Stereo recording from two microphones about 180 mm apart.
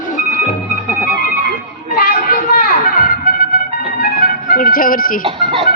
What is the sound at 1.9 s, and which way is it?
Music, 55° left (ahead or behind).